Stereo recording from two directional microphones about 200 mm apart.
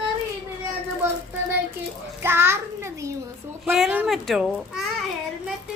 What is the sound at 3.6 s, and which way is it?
Speech, centre (ahead or behind).